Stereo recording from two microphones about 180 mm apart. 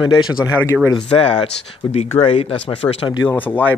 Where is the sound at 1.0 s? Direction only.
30° left (ahead or behind).